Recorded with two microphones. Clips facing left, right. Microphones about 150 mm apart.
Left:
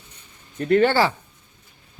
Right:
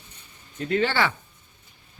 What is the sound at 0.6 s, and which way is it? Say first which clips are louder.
Speech: left 7 dB; 55° left (ahead or behind).